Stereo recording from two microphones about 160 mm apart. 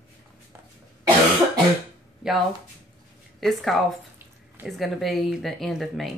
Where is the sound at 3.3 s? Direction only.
Centre (ahead or behind).